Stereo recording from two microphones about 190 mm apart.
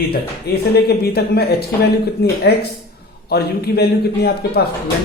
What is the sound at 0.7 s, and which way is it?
A man's voice, 55° left (ahead or behind).